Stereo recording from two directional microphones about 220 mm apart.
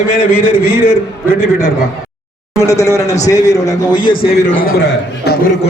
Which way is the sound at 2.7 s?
15° left (ahead or behind).